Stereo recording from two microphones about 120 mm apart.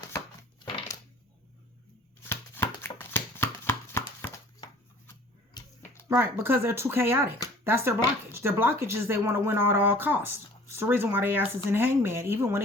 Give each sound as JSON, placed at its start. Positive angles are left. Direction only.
{"t": 2.2, "sound": "chopping", "side_deg": 20}
{"t": 5.6, "sound": "a sound", "side_deg": 35}
{"t": 6.1, "sound": "speech", "side_deg": -20}